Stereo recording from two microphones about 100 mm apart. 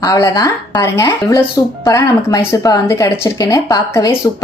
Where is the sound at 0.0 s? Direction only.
40° left (ahead or behind).